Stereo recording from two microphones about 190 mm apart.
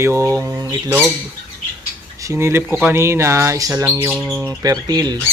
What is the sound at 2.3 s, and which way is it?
Speech, 15° right (ahead or behind).